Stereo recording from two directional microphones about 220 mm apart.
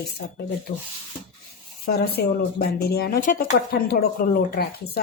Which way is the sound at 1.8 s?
40° left (ahead or behind).